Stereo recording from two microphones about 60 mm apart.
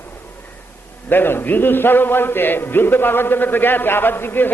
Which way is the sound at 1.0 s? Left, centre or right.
Left.